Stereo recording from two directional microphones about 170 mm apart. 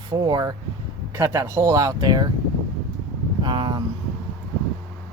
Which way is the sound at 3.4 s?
25° right (ahead or behind).